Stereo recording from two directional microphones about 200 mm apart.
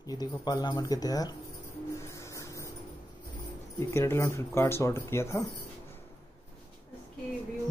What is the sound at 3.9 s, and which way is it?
Speech, 15° left (ahead or behind).